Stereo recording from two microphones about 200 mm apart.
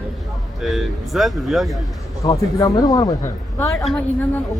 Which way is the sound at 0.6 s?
Centre (ahead or behind).